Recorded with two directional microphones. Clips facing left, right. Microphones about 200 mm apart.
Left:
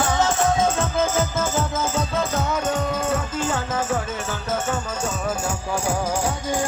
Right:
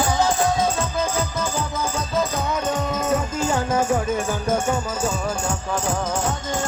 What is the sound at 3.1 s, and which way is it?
Music, 10° right (ahead or behind).